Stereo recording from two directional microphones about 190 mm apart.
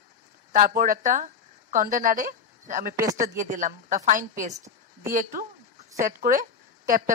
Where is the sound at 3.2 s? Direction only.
40° right (ahead or behind).